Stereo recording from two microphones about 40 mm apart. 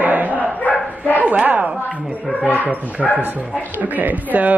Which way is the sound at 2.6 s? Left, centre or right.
Right.